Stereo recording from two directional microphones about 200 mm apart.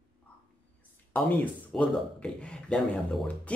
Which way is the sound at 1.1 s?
5° left (ahead or behind).